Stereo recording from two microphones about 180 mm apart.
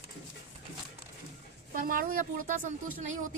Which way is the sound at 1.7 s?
50° right (ahead or behind).